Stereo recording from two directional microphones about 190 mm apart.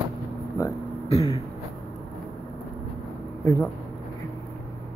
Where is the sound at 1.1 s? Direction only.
30° left (ahead or behind).